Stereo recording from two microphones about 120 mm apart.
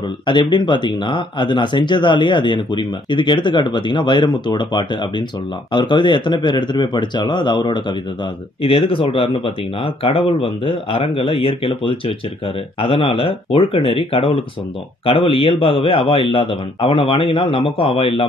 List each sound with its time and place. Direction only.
0.3 s speech: 40° left (ahead or behind)